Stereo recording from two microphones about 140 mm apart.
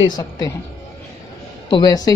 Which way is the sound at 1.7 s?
30° left (ahead or behind).